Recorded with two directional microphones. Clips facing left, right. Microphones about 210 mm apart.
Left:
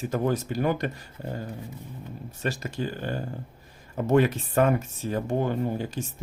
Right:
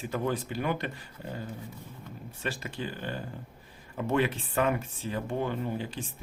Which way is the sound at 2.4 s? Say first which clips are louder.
Left 5 dB; 40° left (ahead or behind).